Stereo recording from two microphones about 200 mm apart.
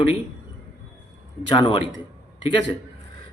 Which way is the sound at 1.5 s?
25° left (ahead or behind).